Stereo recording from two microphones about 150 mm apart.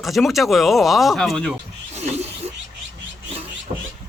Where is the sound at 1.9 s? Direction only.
45° right (ahead or behind).